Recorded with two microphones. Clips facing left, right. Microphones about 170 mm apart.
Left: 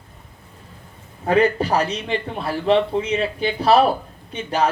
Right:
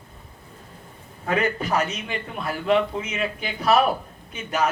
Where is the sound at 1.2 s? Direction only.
30° left (ahead or behind).